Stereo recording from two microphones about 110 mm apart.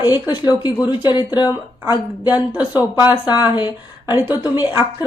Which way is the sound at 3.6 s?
45° left (ahead or behind).